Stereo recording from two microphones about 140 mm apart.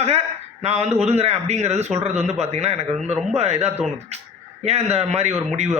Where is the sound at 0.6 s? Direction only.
50° right (ahead or behind).